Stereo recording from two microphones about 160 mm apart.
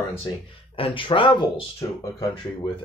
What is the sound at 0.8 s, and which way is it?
Speech, 30° left (ahead or behind).